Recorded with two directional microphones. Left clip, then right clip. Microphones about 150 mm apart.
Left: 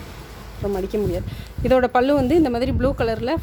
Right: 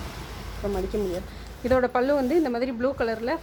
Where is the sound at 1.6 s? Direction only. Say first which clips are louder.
Left 5 dB; 90° left.